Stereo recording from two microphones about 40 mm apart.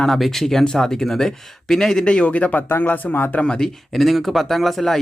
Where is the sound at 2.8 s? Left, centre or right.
Left.